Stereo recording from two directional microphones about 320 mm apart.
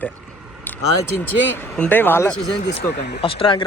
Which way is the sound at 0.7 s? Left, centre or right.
Centre.